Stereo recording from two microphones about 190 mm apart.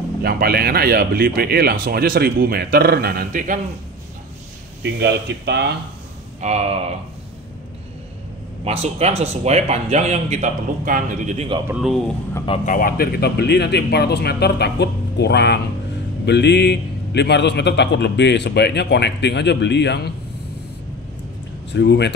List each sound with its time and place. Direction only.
0.2 s speech: 55° right (ahead or behind)
4.8 s speech: 65° right (ahead or behind)
6.4 s speech: 35° right (ahead or behind)
8.6 s speech: 35° right (ahead or behind)
11.6 s speech: 5° right (ahead or behind)
12.6 s a man's voice: 45° left (ahead or behind); by 20.0 s 65° left (ahead or behind)
21.7 s a man's voice: 65° left (ahead or behind)